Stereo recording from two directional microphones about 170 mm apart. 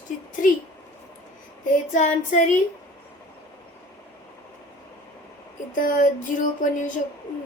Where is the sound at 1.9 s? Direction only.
45° left (ahead or behind).